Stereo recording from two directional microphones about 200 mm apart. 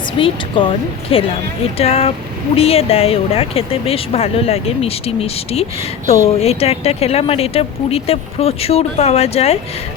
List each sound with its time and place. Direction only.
0.2 s speech: 25° left (ahead or behind)